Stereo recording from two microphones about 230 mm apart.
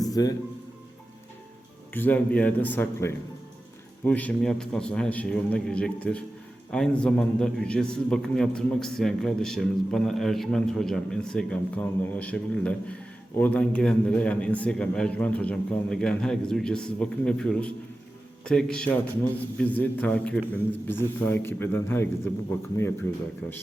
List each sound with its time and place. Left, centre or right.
0.1 s speech: centre
1.9 s a man's voice: centre